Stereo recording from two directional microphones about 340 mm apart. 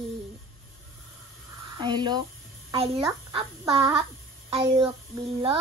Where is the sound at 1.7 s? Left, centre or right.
Centre.